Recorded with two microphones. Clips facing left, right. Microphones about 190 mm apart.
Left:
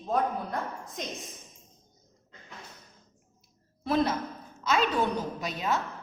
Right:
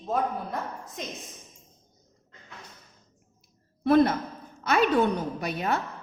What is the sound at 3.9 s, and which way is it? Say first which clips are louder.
A woman's voice: right 6 dB; 55° right (ahead or behind).